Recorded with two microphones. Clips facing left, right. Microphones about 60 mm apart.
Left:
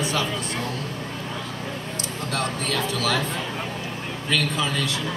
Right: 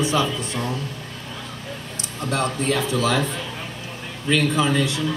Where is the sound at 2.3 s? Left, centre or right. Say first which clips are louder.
Right 4 dB; right.